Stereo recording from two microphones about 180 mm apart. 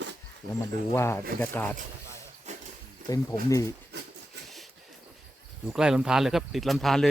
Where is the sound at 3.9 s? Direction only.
70° right (ahead or behind).